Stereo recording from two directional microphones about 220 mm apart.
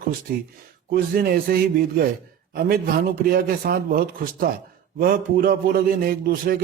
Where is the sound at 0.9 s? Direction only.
45° right (ahead or behind).